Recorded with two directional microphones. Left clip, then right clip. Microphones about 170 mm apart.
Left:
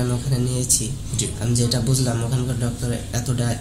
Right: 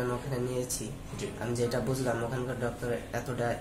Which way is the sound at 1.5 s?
5° left (ahead or behind).